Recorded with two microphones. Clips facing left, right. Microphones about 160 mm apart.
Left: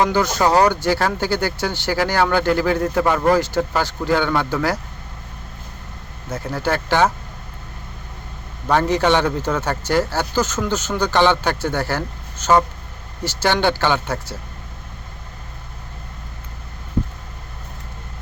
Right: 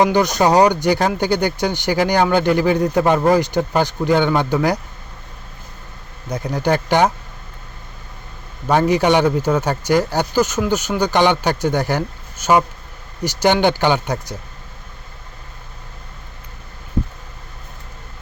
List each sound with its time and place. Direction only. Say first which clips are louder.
0.0 s speech: right 3 dB; 20° right (ahead or behind)
6.3 s speech: right 3 dB; 15° right (ahead or behind)
8.6 s speech: right 2 dB; 10° right (ahead or behind)